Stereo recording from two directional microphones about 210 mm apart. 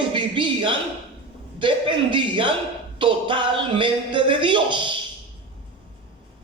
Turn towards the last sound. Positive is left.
turn(degrees=-20)  # may be behind; listen again after turning